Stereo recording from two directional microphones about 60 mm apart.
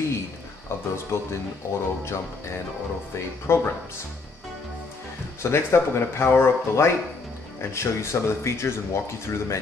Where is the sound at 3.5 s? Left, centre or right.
Left.